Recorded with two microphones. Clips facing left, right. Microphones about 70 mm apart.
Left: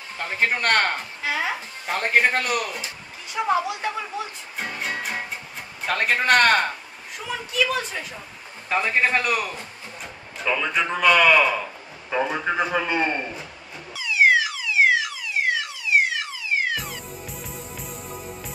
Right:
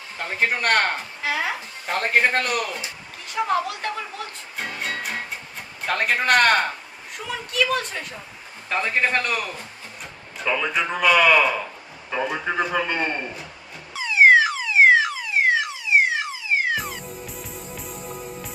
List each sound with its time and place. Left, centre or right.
0.2 s a man's voice: centre
12.1 s a man's voice: centre
13.9 s alarm: right
17.8 s music: centre